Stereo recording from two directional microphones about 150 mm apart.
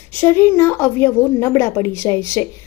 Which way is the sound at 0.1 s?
15° left (ahead or behind).